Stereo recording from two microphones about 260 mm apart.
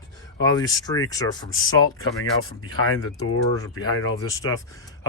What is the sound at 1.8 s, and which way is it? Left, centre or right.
Speech, left.